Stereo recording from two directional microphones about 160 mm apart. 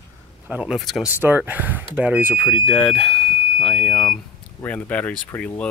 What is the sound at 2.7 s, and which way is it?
Speech, centre (ahead or behind).